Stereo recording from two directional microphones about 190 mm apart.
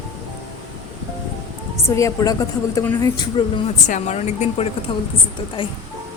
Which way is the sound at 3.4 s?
25° left (ahead or behind).